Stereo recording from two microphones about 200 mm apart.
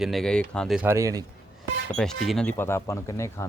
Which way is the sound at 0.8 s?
15° right (ahead or behind).